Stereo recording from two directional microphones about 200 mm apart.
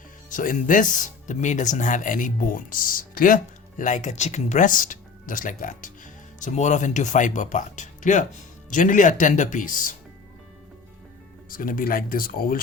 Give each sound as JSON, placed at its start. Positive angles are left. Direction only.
{"t": 0.3, "sound": "speech", "side_deg": 40}
{"t": 11.4, "sound": "speech", "side_deg": 45}